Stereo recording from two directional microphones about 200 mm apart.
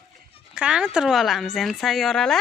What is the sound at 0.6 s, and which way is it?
Speech, 5° right (ahead or behind).